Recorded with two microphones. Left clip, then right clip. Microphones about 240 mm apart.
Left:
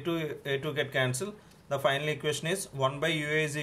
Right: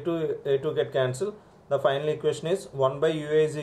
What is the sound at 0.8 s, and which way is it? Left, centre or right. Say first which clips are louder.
Speech: right 4 dB; left.